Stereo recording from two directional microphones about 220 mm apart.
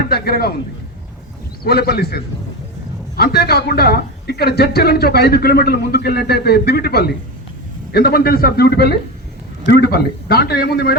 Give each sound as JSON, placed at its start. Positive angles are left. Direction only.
{"t": 0.1, "sound": "a man's voice", "side_deg": 45}
{"t": 1.6, "sound": "a man's voice", "side_deg": 45}